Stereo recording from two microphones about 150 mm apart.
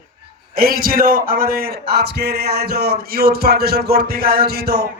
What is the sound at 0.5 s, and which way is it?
A man's voice, 80° right.